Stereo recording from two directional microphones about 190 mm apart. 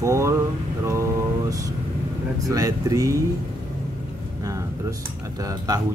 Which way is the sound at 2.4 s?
20° right (ahead or behind).